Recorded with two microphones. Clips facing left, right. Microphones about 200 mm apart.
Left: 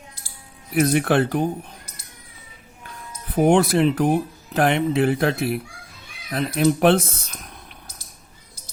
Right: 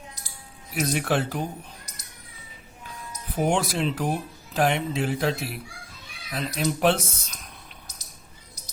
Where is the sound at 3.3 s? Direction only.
55° left (ahead or behind).